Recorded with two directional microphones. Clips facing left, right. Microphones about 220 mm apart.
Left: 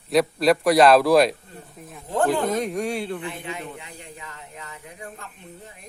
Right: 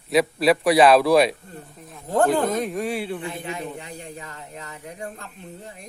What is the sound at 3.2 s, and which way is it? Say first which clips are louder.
Speech: right 2 dB; 40° right (ahead or behind).